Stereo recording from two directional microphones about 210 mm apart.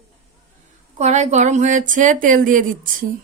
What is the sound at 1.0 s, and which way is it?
A woman's voice, 35° right (ahead or behind).